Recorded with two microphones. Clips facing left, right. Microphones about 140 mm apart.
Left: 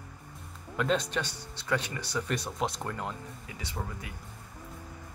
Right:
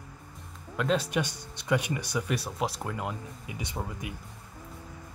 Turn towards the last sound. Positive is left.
turn(degrees=-20)  # may be behind; listen again after turning